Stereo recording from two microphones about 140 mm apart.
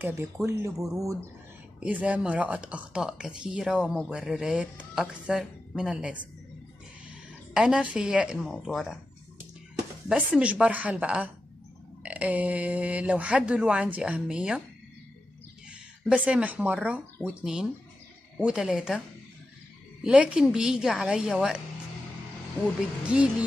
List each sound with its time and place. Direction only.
0.0 s speech: 15° right (ahead or behind)
1.8 s speech: 10° right (ahead or behind)
7.5 s speech: 5° right (ahead or behind)
10.0 s speech: 5° right (ahead or behind)
15.7 s speech: 5° right (ahead or behind)
20.0 s speech: 5° right (ahead or behind)
23.0 s speech: 5° right (ahead or behind)